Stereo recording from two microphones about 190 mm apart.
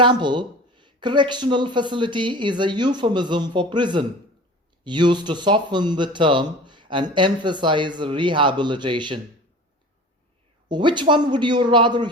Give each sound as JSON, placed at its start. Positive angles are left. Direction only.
{"t": 0.0, "sound": "speech", "side_deg": -25}
{"t": 10.7, "sound": "speech", "side_deg": -25}